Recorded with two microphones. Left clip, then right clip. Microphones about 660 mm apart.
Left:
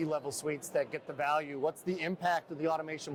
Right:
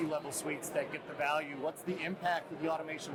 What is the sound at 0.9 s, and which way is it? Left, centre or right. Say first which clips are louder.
A man's voice: left 2 dB; left.